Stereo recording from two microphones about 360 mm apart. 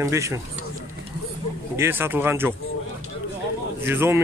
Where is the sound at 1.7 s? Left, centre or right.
Centre.